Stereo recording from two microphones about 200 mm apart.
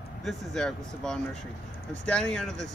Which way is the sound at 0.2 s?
Centre (ahead or behind).